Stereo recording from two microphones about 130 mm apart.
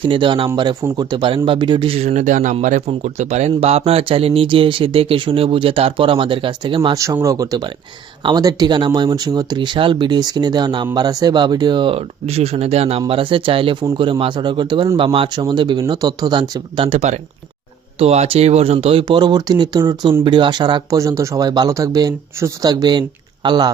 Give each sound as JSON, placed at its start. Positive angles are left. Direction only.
{"t": 0.0, "sound": "speech", "side_deg": -40}
{"t": 2.0, "sound": "speech", "side_deg": -70}
{"t": 6.9, "sound": "speech", "side_deg": -25}
{"t": 21.0, "sound": "speech", "side_deg": -25}